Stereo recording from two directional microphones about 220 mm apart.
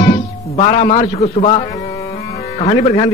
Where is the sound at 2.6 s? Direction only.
30° left (ahead or behind).